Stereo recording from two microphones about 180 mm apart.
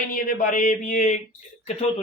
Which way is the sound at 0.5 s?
45° left (ahead or behind).